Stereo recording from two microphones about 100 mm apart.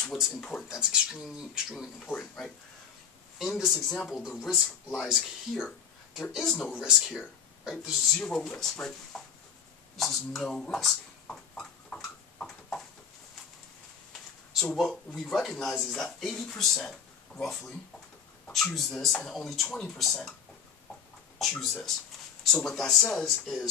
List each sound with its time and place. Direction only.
0.0 s speech: 5° left (ahead or behind)
2.0 s speech: 5° left (ahead or behind)
6.7 s speech: 5° right (ahead or behind)
8.2 s speech: 5° left (ahead or behind)
9.9 s a sound: centre (ahead or behind)
14.5 s speech: centre (ahead or behind)
21.4 s speech: 5° left (ahead or behind)